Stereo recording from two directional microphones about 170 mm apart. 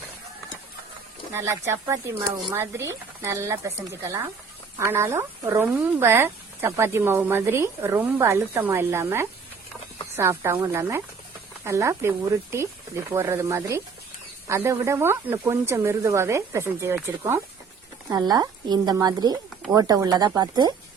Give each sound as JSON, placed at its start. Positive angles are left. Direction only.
{"t": 1.3, "sound": "a woman's voice", "side_deg": -15}